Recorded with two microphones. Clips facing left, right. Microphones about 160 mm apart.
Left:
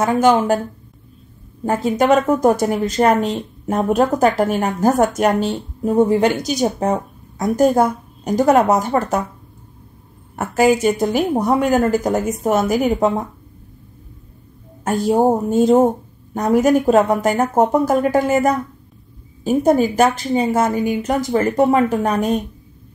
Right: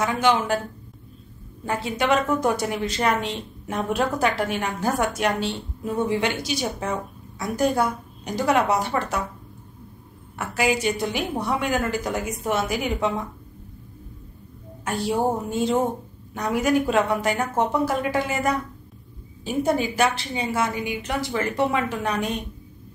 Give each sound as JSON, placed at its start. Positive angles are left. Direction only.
{"t": 0.0, "sound": "speech", "side_deg": 45}
{"t": 1.6, "sound": "speech", "side_deg": 45}
{"t": 10.3, "sound": "speech", "side_deg": 45}
{"t": 14.9, "sound": "speech", "side_deg": 45}